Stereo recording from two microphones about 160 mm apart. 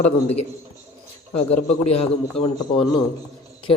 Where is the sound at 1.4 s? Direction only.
40° left (ahead or behind).